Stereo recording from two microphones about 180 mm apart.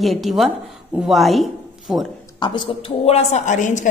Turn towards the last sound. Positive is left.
turn(degrees=45)  # may be behind; listen again after turning